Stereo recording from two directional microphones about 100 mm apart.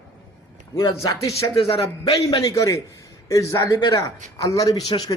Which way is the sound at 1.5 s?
70° left (ahead or behind).